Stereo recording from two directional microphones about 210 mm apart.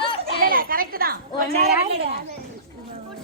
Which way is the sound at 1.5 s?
30° right (ahead or behind).